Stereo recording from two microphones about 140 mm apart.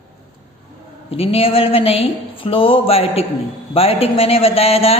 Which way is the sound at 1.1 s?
45° left (ahead or behind).